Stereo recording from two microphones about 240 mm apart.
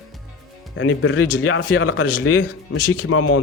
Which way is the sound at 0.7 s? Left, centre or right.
Left.